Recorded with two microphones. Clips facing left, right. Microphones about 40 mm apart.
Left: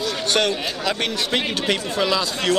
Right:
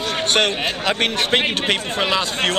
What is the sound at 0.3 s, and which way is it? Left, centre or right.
Speech, right.